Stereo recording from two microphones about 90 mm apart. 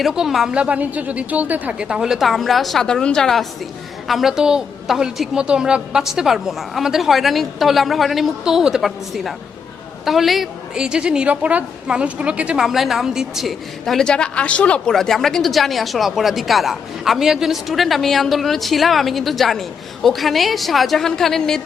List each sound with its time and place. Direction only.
0.0 s speech: 5° right (ahead or behind); by 14.9 s 15° left (ahead or behind)
14.9 s speech: 5° left (ahead or behind)